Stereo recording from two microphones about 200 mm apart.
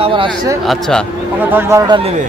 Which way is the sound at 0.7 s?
Centre (ahead or behind).